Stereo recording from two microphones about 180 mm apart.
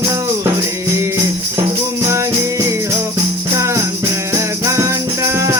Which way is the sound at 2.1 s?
15° right (ahead or behind).